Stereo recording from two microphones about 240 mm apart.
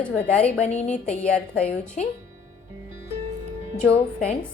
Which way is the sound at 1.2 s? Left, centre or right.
Centre.